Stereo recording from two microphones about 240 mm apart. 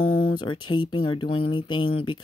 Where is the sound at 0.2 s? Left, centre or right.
Centre.